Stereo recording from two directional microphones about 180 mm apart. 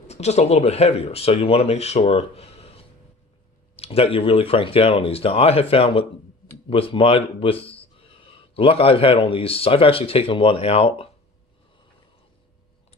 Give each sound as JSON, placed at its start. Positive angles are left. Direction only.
{"t": 0.1, "sound": "speech", "side_deg": 35}